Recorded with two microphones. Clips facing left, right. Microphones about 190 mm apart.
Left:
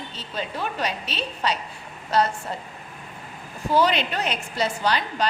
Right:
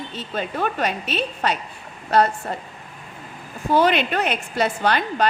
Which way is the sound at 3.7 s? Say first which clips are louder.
Right 3 dB; 55° right (ahead or behind).